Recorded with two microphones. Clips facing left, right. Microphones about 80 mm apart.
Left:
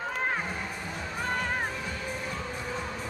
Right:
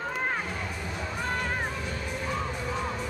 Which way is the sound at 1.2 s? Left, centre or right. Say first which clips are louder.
Left 1 dB; centre.